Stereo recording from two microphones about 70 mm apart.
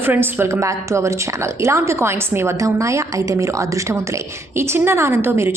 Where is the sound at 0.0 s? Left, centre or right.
Right.